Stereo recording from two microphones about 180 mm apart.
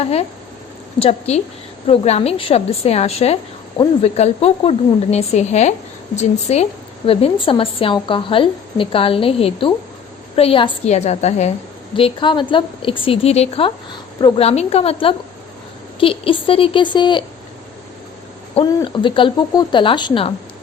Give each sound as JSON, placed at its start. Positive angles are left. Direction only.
{"t": 0.0, "sound": "a woman's voice", "side_deg": 35}
{"t": 18.9, "sound": "a woman's voice", "side_deg": 30}